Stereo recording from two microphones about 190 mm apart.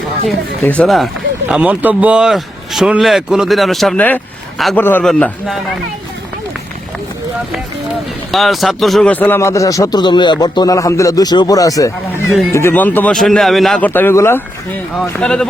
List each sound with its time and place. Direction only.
0.6 s speech: 5° left (ahead or behind)
8.3 s speech: centre (ahead or behind)